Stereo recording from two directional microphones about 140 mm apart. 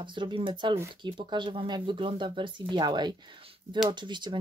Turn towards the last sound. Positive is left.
turn(degrees=-35)  # may be behind; listen again after turning